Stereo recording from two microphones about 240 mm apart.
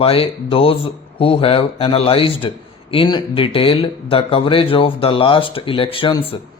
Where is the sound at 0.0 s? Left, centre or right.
Left.